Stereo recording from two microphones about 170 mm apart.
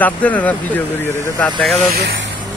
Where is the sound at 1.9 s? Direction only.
65° right (ahead or behind).